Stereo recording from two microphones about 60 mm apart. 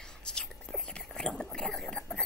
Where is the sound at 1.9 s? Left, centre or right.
Centre.